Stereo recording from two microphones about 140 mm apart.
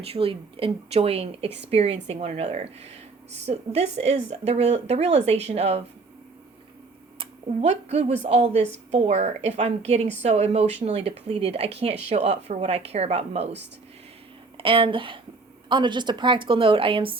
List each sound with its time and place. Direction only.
0.0 s speech: 45° right (ahead or behind)
7.2 s speech: 50° right (ahead or behind)
14.6 s a woman's voice: 35° right (ahead or behind)